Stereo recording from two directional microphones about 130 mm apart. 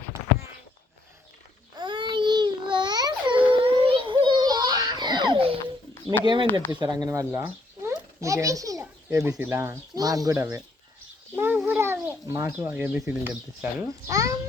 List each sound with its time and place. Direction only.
1.7 s babbling: 35° right (ahead or behind)
6.1 s a child's voice: 35° right (ahead or behind)
11.3 s a sound: 15° right (ahead or behind)
12.2 s speech: 20° right (ahead or behind)
13.8 s a child's voice: 25° right (ahead or behind)